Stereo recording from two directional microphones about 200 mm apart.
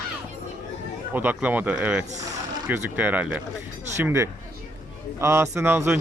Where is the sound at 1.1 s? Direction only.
10° right (ahead or behind).